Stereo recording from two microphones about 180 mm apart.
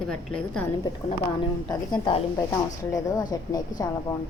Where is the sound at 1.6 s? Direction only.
25° left (ahead or behind).